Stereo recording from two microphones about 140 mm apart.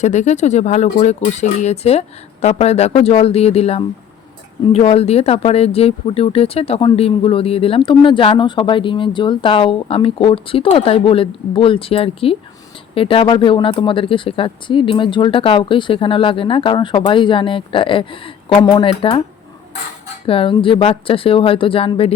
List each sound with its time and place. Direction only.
0.0 s speech: 55° left (ahead or behind); by 19.2 s 40° left (ahead or behind)
20.2 s speech: 40° left (ahead or behind)